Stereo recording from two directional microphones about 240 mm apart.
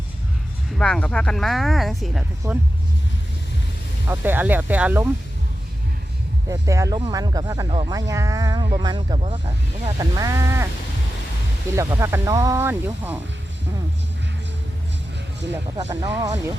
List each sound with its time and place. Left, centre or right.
0.8 s speech: centre
2.4 s speech: centre
4.1 s speech: centre
6.5 s speech: centre
11.8 s speech: centre
15.8 s speech: centre